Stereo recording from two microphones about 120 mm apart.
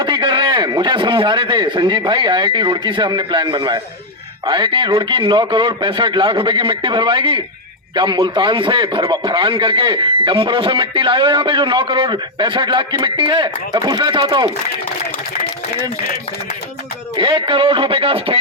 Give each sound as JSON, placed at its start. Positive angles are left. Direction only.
{"t": 0.0, "sound": "a man's voice", "side_deg": -40}
{"t": 17.2, "sound": "a man's voice", "side_deg": -45}